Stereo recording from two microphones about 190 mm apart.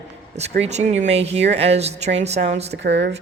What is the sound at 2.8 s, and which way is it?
Speech, 65° right (ahead or behind).